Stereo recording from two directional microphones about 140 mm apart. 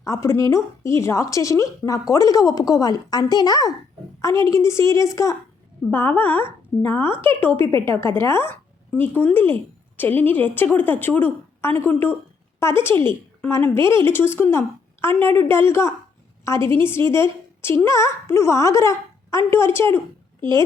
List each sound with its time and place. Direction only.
0.0 s a woman's voice: 20° left (ahead or behind)
13.7 s speech: 35° right (ahead or behind)
14.1 s a woman's voice: 15° left (ahead or behind)